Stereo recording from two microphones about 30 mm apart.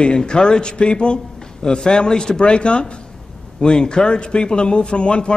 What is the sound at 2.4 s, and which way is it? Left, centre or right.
A man's voice, left.